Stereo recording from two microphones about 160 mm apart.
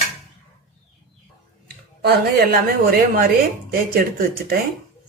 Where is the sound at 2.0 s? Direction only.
70° right (ahead or behind).